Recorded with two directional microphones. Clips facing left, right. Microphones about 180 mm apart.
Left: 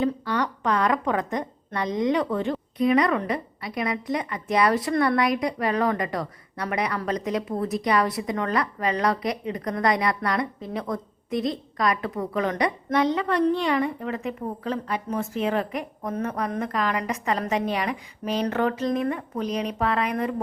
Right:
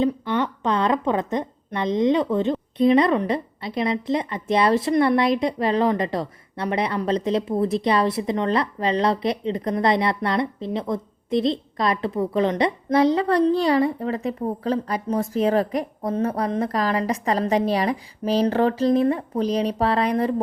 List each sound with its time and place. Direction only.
0.0 s a woman's voice: 25° right (ahead or behind)